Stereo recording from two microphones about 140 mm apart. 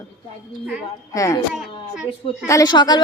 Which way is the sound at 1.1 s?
25° left (ahead or behind).